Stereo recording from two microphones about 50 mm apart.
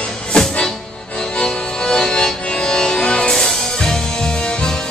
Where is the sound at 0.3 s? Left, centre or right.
Centre.